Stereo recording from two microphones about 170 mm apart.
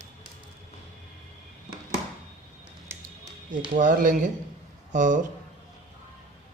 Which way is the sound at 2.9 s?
15° right (ahead or behind).